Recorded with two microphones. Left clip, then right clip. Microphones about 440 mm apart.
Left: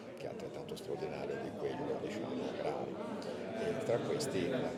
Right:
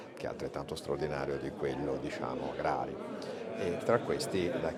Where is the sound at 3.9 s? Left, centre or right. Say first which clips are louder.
Right 7 dB; right.